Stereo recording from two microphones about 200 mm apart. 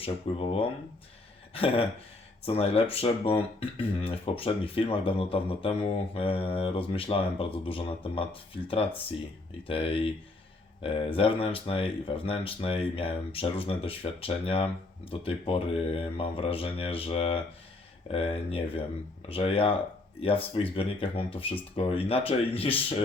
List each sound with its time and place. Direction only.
0.0 s speech: 30° left (ahead or behind)